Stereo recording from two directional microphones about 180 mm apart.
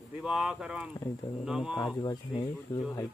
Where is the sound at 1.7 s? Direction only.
25° left (ahead or behind).